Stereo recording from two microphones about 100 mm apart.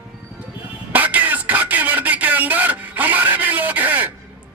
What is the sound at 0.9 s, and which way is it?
Throat clearing, 15° right (ahead or behind).